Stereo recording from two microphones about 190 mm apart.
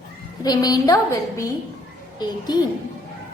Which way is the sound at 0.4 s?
20° left (ahead or behind).